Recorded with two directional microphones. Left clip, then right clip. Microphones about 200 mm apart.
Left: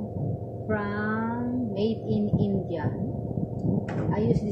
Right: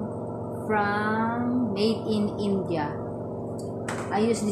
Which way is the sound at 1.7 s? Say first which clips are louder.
Right 1 dB; 15° right (ahead or behind).